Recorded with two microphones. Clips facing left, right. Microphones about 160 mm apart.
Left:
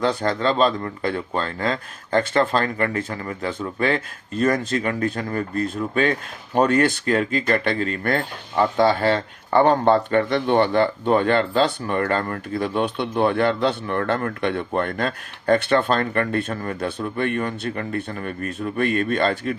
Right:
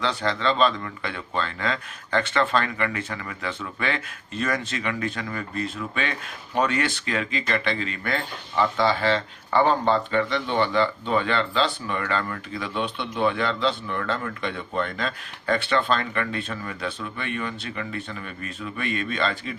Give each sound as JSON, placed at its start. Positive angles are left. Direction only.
{"t": 0.0, "sound": "speech", "side_deg": 45}